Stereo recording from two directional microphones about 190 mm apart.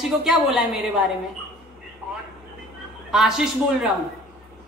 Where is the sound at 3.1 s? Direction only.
5° right (ahead or behind).